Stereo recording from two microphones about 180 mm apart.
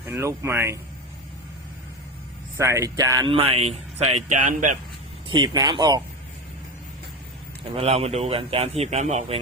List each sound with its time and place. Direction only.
0.0 s speech: 15° right (ahead or behind)
2.6 s speech: 15° right (ahead or behind); by 3.8 s 35° right (ahead or behind)
4.3 s speech: 45° right (ahead or behind)
5.4 s speech: 25° right (ahead or behind)
7.6 s speech: 35° right (ahead or behind)